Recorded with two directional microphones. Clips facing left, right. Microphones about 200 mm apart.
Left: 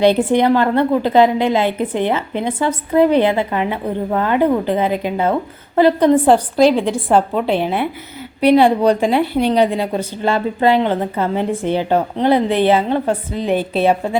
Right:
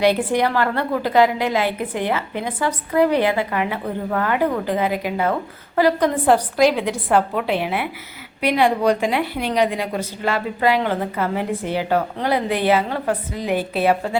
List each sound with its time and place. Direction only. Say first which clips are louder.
0.0 s a woman's voice: left 5 dB; 25° left (ahead or behind)